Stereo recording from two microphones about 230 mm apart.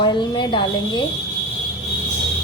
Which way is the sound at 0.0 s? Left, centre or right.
Centre.